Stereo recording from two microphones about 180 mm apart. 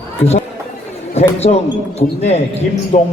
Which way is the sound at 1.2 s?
35° left (ahead or behind).